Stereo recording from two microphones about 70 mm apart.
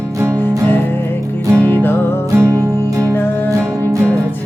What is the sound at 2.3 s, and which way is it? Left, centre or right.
Music, right.